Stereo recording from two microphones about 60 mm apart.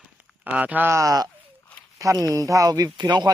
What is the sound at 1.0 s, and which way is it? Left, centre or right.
Speech, right.